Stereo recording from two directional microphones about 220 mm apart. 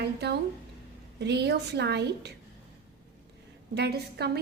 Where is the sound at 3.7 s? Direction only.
45° right (ahead or behind).